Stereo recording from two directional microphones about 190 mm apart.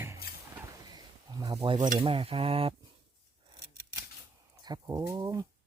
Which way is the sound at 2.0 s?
30° right (ahead or behind).